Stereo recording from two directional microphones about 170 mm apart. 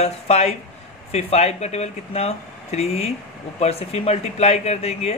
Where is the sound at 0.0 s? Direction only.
40° left (ahead or behind).